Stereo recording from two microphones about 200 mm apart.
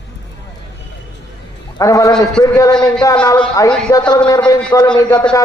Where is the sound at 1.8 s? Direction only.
15° left (ahead or behind).